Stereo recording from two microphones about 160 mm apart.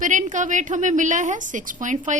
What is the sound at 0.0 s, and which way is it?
A woman's voice, 50° right (ahead or behind).